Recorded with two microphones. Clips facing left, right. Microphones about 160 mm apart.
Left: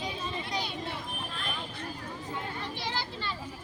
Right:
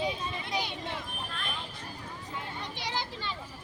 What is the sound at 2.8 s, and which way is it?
Speech, 15° right (ahead or behind).